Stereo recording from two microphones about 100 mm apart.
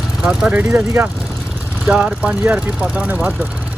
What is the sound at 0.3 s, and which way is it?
Speech, 10° right (ahead or behind).